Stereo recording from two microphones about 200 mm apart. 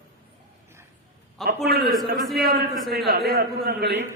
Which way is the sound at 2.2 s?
Centre (ahead or behind).